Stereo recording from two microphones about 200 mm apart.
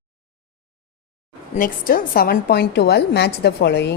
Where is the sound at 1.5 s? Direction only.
45° left (ahead or behind).